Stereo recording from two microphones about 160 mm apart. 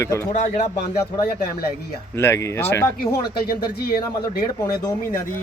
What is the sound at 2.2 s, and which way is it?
Speech, 15° left (ahead or behind).